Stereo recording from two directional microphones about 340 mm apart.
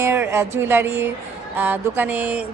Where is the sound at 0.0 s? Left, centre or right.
Centre.